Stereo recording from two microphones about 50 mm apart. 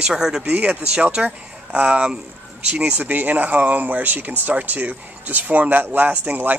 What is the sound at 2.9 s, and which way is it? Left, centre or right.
Speech, right.